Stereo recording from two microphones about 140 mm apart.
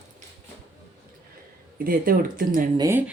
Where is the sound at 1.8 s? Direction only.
90° right.